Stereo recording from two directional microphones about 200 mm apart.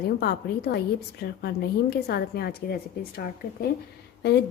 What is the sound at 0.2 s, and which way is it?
A woman's voice, 55° left (ahead or behind).